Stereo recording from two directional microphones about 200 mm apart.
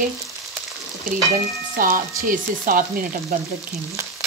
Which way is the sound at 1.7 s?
45° right (ahead or behind).